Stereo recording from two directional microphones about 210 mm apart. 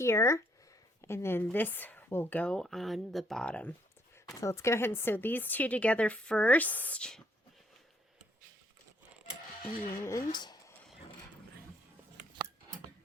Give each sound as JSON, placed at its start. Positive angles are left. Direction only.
{"t": 0.0, "sound": "speech", "side_deg": 15}
{"t": 10.0, "sound": "speech", "side_deg": 15}
{"t": 10.3, "sound": "a sound", "side_deg": 20}